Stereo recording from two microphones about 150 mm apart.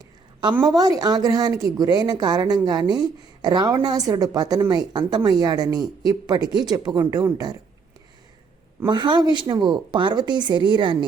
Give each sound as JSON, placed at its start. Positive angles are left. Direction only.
{"t": 0.6, "sound": "speech", "side_deg": -25}
{"t": 8.9, "sound": "speech", "side_deg": -30}